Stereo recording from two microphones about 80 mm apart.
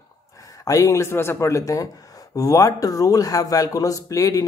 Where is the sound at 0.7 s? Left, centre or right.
Left.